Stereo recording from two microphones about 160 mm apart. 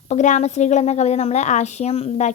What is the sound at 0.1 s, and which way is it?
A woman's voice, 45° left (ahead or behind).